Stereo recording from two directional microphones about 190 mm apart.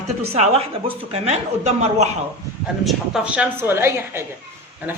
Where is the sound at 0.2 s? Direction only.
30° right (ahead or behind).